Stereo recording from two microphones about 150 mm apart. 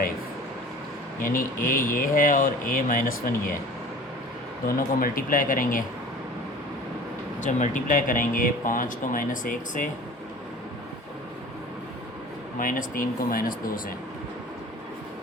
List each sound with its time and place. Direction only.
1.2 s speech: 70° left (ahead or behind)
4.9 s speech: 70° left (ahead or behind)
7.4 s speech: 55° left (ahead or behind)
12.5 s speech: 65° left (ahead or behind)